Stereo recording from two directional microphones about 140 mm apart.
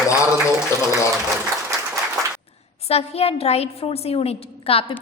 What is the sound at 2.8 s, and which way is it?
A woman's voice, 45° left (ahead or behind).